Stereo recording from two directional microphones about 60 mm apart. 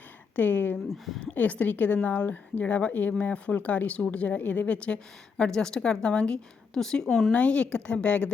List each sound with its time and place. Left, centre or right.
0.3 s speech: left
0.9 s speech: centre
1.2 s speech: left
5.4 s a woman's voice: centre
7.3 s speech: left